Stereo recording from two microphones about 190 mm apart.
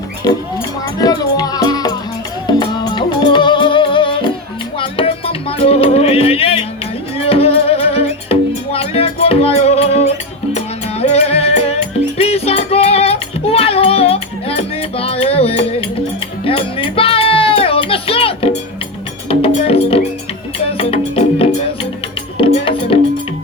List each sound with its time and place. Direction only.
0.9 s music: 20° left (ahead or behind)